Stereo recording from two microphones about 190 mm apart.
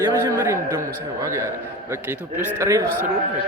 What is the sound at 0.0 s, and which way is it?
Speech, 15° right (ahead or behind).